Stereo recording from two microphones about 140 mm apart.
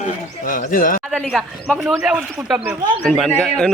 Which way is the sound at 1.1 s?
5° left (ahead or behind).